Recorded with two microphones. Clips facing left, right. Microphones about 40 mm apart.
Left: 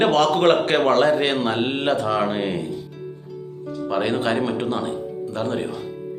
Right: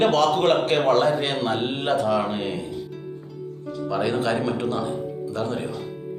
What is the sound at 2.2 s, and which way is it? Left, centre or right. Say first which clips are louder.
Speech: left 3 dB; left.